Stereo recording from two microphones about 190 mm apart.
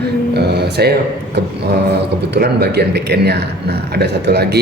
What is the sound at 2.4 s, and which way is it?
A man's voice, 60° right (ahead or behind).